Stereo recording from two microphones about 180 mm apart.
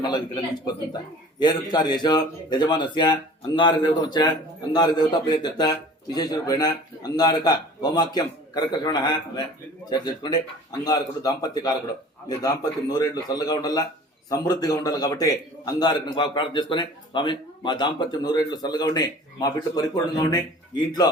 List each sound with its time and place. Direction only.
0.0 s a man's voice: 25° left (ahead or behind)
12.9 s a man's voice: 20° left (ahead or behind)